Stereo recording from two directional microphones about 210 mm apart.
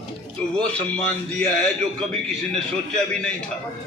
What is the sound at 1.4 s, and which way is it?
A man's voice, 5° left (ahead or behind).